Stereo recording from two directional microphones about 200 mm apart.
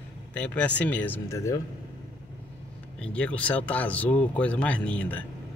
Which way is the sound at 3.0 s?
5° left (ahead or behind).